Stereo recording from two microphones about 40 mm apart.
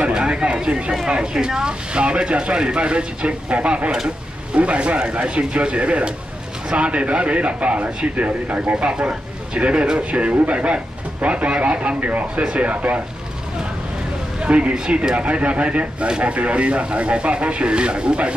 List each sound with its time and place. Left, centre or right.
0.1 s a sound: right
1.0 s a man's voice: right
14.4 s a man's voice: right